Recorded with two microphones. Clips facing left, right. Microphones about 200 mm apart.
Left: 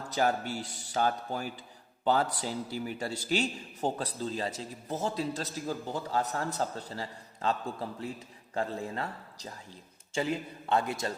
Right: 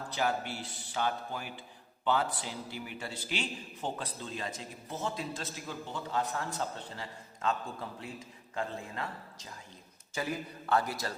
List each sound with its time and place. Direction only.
0.1 s a man's voice: 40° left (ahead or behind); by 11.1 s 25° left (ahead or behind)